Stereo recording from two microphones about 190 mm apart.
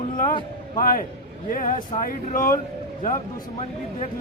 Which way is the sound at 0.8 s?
50° left (ahead or behind).